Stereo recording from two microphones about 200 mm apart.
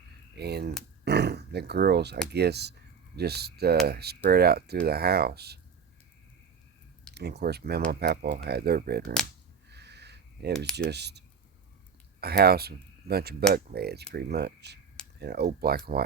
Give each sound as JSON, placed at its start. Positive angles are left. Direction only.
{"t": 0.3, "sound": "speech", "side_deg": -55}
{"t": 1.0, "sound": "a sound", "side_deg": -55}
{"t": 2.3, "sound": "speech", "side_deg": -55}
{"t": 7.1, "sound": "speech", "side_deg": -55}
{"t": 9.6, "sound": "a sound", "side_deg": -55}
{"t": 10.8, "sound": "speech", "side_deg": -55}
{"t": 12.2, "sound": "speech", "side_deg": -50}